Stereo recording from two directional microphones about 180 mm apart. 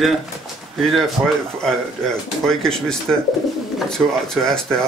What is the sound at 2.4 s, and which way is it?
Speech, 5° left (ahead or behind).